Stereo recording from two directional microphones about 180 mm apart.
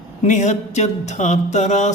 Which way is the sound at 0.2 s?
40° left (ahead or behind).